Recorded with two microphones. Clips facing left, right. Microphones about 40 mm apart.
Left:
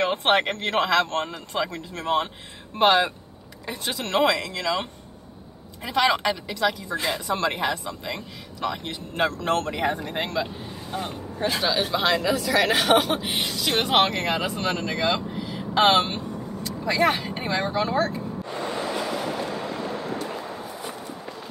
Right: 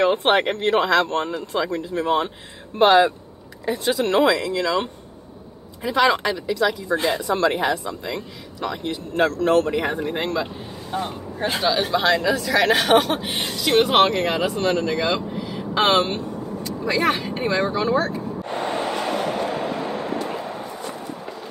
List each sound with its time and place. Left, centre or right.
0.0 s speech: centre
2.8 s speech: centre
5.9 s speech: centre
10.4 s speech: centre
11.6 s speech: centre
18.5 s a sound: right